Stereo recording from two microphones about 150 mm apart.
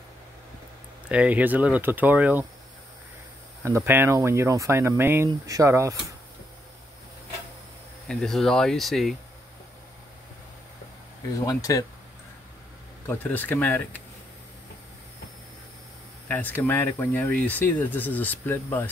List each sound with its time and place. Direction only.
1.0 s speech: 10° right (ahead or behind)
3.6 s speech: 15° right (ahead or behind)
8.1 s speech: centre (ahead or behind)
11.3 s speech: 25° left (ahead or behind)
13.0 s speech: 10° left (ahead or behind)
16.3 s speech: 10° left (ahead or behind)